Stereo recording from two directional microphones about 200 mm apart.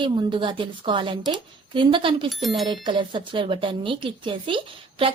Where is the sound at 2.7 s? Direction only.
25° right (ahead or behind).